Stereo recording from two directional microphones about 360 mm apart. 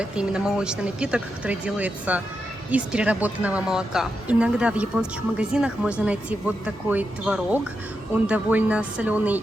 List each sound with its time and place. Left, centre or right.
0.0 s speech: centre